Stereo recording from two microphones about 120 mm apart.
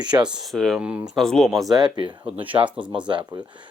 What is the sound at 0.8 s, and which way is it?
Speech, 10° right (ahead or behind).